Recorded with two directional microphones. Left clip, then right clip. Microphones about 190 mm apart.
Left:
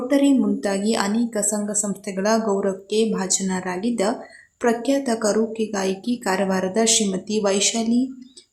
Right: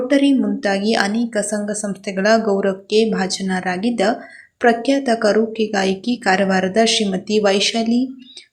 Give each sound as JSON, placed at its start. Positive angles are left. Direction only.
{"t": 0.1, "sound": "a woman's voice", "side_deg": 0}